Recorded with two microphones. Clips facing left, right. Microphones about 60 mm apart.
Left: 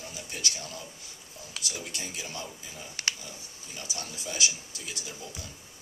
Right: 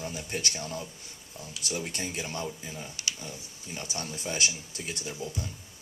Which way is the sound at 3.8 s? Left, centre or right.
Right.